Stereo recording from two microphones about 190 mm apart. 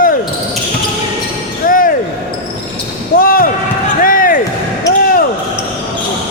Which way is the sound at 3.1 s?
50° left (ahead or behind).